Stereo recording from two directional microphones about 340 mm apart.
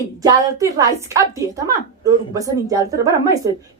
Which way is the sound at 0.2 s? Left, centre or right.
Centre.